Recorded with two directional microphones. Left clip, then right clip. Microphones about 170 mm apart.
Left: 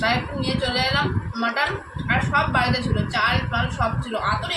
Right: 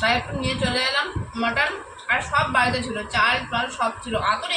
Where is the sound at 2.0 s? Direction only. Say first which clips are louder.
Even; 5° left (ahead or behind).